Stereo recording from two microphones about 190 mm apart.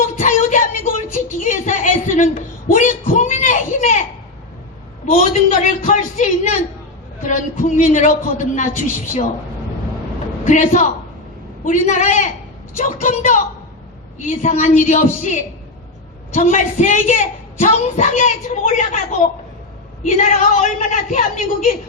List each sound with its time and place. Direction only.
0.2 s a sound: 40° left (ahead or behind)
5.0 s a woman's voice: 40° left (ahead or behind)
10.4 s a woman's voice: 40° left (ahead or behind)